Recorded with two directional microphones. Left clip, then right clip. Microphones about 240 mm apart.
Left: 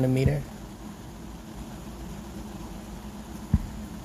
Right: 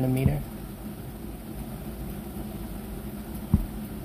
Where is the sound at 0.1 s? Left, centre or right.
Centre.